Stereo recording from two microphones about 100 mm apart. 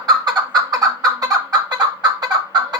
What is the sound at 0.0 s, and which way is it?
Fowl, 40° right (ahead or behind).